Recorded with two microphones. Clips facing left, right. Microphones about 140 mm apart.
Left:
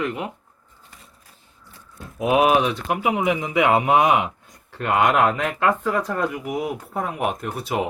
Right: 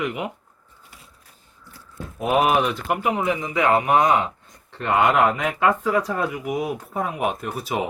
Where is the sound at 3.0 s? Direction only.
15° left (ahead or behind); by 7.8 s centre (ahead or behind).